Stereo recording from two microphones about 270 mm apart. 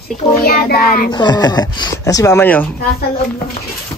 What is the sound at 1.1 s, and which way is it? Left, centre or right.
Speech, centre.